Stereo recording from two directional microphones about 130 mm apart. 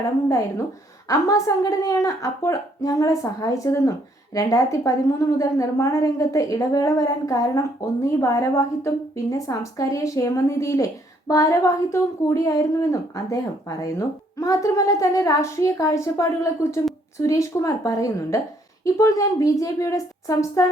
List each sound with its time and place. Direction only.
0.3 s speech: 25° left (ahead or behind)